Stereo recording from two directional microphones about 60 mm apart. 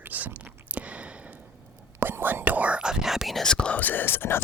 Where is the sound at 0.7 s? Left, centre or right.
Right.